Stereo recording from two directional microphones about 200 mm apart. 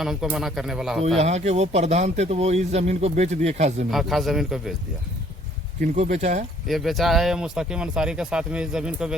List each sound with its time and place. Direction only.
0.0 s speech: centre (ahead or behind)
1.0 s a man's voice: 35° right (ahead or behind)
3.9 s speech: centre (ahead or behind)
5.8 s a man's voice: 40° right (ahead or behind)
6.7 s speech: centre (ahead or behind)